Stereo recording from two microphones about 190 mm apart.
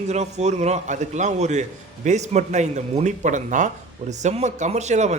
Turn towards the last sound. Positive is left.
turn(degrees=-35)  # may be behind; listen again after turning